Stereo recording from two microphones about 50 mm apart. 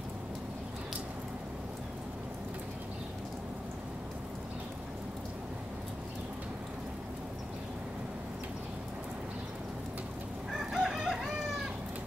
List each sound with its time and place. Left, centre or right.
10.5 s chicken: centre